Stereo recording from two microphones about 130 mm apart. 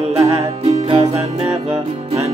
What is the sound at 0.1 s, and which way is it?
Music, 50° right (ahead or behind).